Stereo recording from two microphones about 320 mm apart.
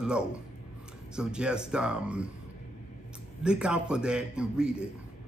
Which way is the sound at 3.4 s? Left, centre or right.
Centre.